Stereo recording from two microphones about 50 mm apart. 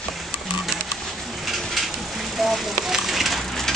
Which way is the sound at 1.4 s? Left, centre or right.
Centre.